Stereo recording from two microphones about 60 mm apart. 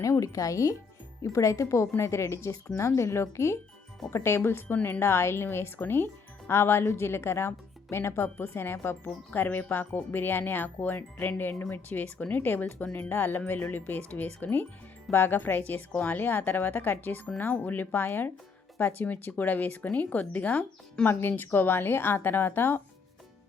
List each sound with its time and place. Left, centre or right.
0.0 s a woman's voice: left
21.1 s speech: left